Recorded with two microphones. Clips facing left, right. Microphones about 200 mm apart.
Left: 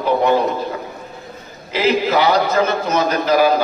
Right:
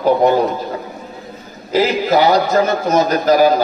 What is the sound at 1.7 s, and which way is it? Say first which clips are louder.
A man's voice: right 2 dB; 40° right (ahead or behind).